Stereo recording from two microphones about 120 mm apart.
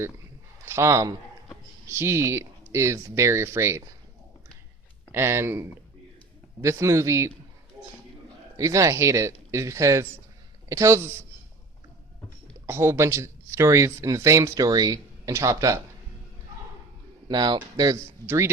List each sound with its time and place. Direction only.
0.6 s speech: 25° right (ahead or behind)
5.1 s speech: 20° right (ahead or behind)
8.5 s speech: 25° right (ahead or behind)
12.6 s speech: 20° right (ahead or behind)
17.2 s speech: 35° right (ahead or behind)